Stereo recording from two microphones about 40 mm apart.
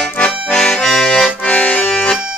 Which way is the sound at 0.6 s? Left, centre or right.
Centre.